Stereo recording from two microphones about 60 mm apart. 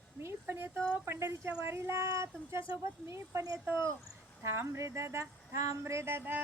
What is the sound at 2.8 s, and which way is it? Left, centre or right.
Female singing, right.